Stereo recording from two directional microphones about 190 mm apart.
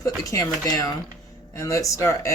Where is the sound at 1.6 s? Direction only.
15° left (ahead or behind).